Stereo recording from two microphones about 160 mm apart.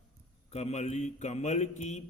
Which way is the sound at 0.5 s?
40° left (ahead or behind).